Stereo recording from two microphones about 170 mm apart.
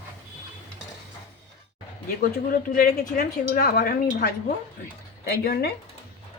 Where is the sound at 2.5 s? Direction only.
55° left (ahead or behind).